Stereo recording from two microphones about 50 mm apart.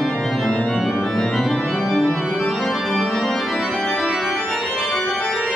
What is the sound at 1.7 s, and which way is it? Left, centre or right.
Organ, centre.